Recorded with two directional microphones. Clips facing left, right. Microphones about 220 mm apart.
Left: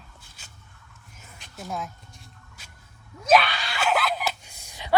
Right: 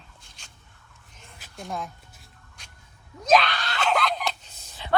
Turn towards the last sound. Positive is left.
turn(degrees=15)  # may be behind; listen again after turning